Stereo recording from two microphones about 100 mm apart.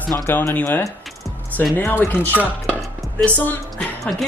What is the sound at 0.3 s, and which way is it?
Speech, 20° left (ahead or behind).